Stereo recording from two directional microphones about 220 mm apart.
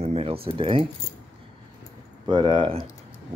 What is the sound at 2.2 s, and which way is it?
Speech, 20° right (ahead or behind).